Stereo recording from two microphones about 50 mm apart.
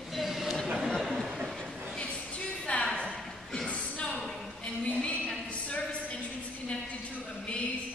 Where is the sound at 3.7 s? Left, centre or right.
Left.